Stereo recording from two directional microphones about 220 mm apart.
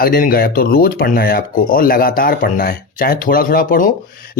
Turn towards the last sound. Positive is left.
turn(degrees=40)  # may be behind; listen again after turning